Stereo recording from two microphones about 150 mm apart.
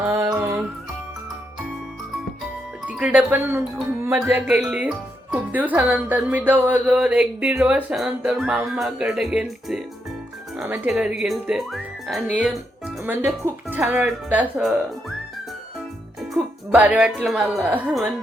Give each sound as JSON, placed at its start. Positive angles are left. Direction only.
{"t": 0.0, "sound": "music", "side_deg": -15}
{"t": 2.8, "sound": "speech", "side_deg": -10}
{"t": 10.8, "sound": "speech", "side_deg": -5}
{"t": 16.7, "sound": "speech", "side_deg": -10}